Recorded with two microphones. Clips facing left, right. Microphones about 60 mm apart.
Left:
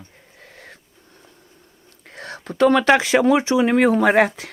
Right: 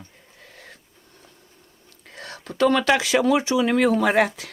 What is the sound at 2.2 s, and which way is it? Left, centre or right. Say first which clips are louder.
Speech: left 4 dB; left.